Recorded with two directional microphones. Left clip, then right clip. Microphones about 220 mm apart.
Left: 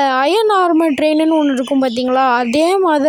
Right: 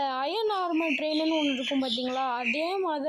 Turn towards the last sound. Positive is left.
turn(degrees=55)  # may be behind; listen again after turning